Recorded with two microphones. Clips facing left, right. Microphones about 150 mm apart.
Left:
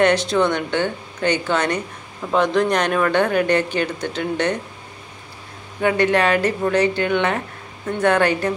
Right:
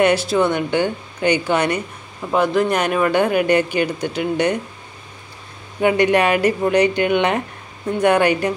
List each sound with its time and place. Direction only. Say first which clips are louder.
0.0 s speech: right 1 dB; 10° right (ahead or behind)
5.8 s speech: right 2 dB; 15° right (ahead or behind)